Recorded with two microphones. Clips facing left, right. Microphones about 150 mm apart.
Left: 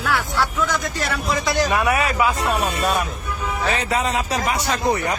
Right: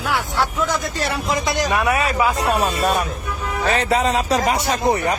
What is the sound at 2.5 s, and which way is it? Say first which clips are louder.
Speech: right 2 dB; 40° right (ahead or behind).